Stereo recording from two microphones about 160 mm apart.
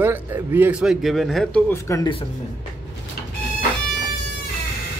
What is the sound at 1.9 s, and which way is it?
Speech, 20° left (ahead or behind).